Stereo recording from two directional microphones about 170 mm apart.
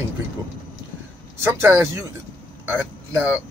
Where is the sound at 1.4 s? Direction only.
15° right (ahead or behind).